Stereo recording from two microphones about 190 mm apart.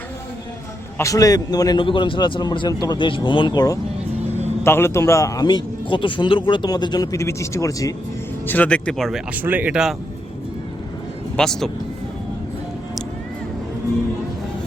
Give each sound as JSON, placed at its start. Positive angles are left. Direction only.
{"t": 0.9, "sound": "a man's voice", "side_deg": 15}
{"t": 11.3, "sound": "speech", "side_deg": 5}